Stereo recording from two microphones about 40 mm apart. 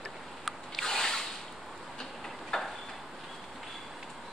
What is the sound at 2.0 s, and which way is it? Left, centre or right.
Tick-tock, centre.